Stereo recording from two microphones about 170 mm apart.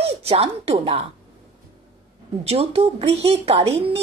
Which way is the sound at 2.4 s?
35° right (ahead or behind).